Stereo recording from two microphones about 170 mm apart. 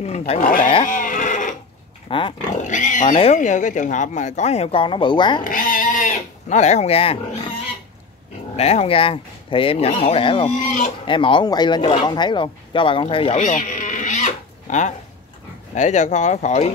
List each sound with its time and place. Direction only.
0.4 s speech: 55° left (ahead or behind)
0.8 s bleat: 50° left (ahead or behind)
2.0 s dog: 30° left (ahead or behind)
2.5 s speech: 45° left (ahead or behind); by 5.4 s 25° left (ahead or behind)
5.4 s goat: 50° left (ahead or behind); by 7.2 s 35° left (ahead or behind)
8.5 s speech: 40° left (ahead or behind)
10.5 s speech: 45° left (ahead or behind)
11.1 s speech: 30° left (ahead or behind)
13.4 s a sound: 45° left (ahead or behind)
15.7 s speech: 45° left (ahead or behind)